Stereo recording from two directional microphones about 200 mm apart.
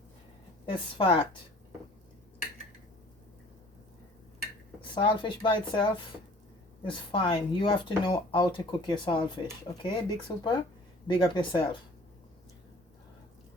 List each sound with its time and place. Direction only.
0.6 s speech: 25° left (ahead or behind)
4.8 s speech: 25° left (ahead or behind)